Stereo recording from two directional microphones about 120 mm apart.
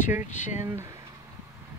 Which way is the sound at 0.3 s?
85° left.